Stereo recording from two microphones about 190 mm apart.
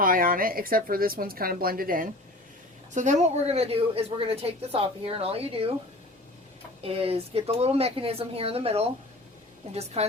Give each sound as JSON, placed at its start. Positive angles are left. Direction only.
{"t": 0.0, "sound": "a woman's voice", "side_deg": -50}
{"t": 6.8, "sound": "a woman's voice", "side_deg": -30}